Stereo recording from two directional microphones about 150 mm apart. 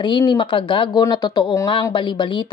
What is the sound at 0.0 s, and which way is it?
Speech, 30° left (ahead or behind).